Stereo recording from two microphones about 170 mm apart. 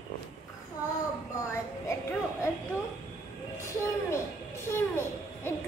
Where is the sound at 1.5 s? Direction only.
15° left (ahead or behind).